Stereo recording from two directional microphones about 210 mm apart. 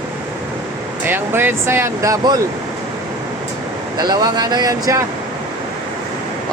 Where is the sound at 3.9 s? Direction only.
20° right (ahead or behind).